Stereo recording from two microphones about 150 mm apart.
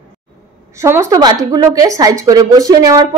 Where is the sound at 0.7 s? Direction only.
20° right (ahead or behind).